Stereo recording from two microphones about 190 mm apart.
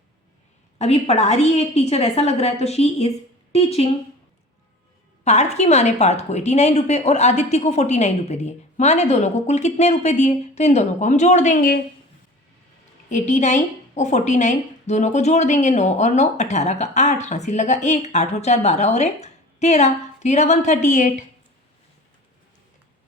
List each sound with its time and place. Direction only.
0.8 s a woman's voice: 35° left (ahead or behind)
5.2 s a woman's voice: 35° left (ahead or behind)
13.1 s a woman's voice: 40° left (ahead or behind)